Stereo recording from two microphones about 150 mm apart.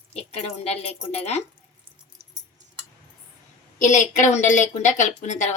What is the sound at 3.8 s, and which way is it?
A woman's voice, 55° left (ahead or behind).